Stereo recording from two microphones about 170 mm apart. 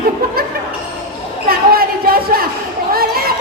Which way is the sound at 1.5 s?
60° right (ahead or behind).